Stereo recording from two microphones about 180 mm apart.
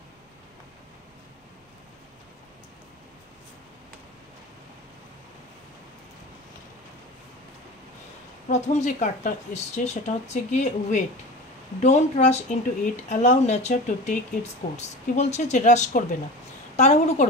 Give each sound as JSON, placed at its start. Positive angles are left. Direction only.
{"t": 8.5, "sound": "speech", "side_deg": 40}